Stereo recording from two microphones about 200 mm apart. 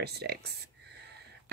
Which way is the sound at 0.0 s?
55° right (ahead or behind).